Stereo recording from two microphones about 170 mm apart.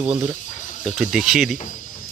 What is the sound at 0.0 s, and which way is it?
Speech, 10° right (ahead or behind).